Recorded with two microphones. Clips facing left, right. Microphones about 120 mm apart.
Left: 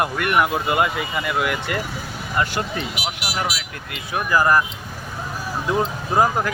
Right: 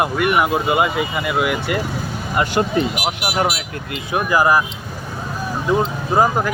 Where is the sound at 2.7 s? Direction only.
50° right (ahead or behind).